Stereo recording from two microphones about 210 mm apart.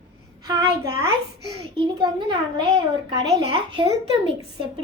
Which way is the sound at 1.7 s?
20° right (ahead or behind).